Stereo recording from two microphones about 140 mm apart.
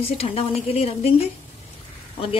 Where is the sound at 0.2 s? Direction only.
45° left (ahead or behind).